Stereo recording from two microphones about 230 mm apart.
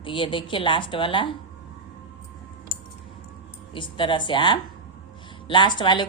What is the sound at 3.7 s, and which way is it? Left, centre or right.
A woman's voice, left.